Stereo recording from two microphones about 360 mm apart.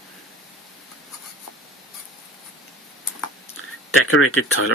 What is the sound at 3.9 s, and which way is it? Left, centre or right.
Speech, left.